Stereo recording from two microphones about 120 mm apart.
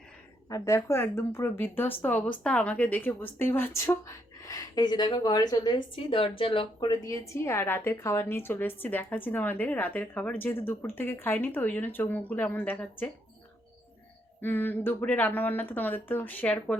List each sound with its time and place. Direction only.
0.4 s a woman's voice: 30° left (ahead or behind)
5.9 s speech: 45° left (ahead or behind)
6.7 s a woman's voice: 30° left (ahead or behind); by 13.1 s 15° left (ahead or behind)
14.4 s a woman's voice: 15° left (ahead or behind)